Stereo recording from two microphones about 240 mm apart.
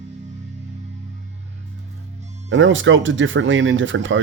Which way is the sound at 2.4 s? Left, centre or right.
Right.